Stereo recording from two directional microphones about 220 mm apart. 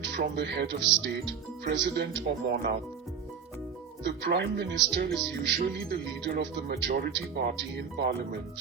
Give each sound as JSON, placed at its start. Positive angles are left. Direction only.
{"t": 0.0, "sound": "speech", "side_deg": -50}
{"t": 4.0, "sound": "speech", "side_deg": -50}